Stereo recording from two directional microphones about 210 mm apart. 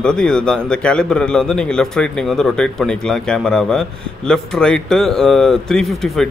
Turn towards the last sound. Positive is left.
turn(degrees=0)  # may be behind; listen again after turning